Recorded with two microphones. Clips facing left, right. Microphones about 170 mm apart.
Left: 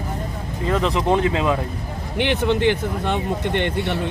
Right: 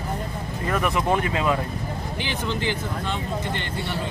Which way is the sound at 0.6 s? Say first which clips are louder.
Left 4 dB; 20° left (ahead or behind).